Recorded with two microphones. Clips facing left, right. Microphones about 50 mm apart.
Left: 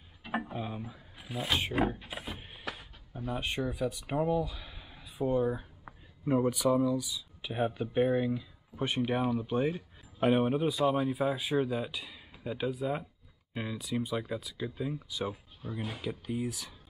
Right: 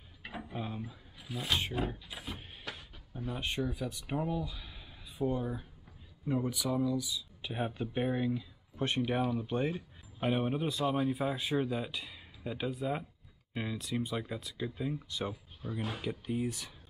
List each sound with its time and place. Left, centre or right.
0.6 s a sound: centre
0.8 s speech: centre
2.2 s a sound: centre
4.1 s speech: centre; by 6.7 s left
6.7 s speech: centre
10.2 s speech: centre